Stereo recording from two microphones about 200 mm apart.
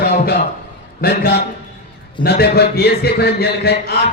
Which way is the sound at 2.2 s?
55° left (ahead or behind).